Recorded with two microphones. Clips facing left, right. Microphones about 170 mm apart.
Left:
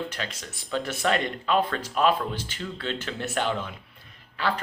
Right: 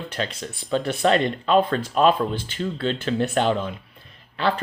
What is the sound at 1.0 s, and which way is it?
Speech, 25° right (ahead or behind).